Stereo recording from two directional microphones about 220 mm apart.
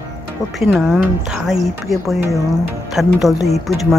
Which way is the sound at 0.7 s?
5° right (ahead or behind).